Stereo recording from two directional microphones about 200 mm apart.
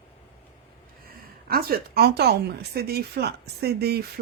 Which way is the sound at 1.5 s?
50° right (ahead or behind).